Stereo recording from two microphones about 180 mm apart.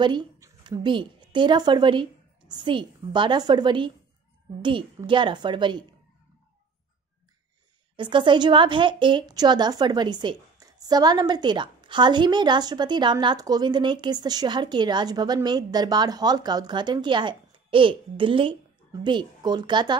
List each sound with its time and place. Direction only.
0.0 s a woman's voice: 25° right (ahead or behind)
7.9 s a woman's voice: 25° right (ahead or behind)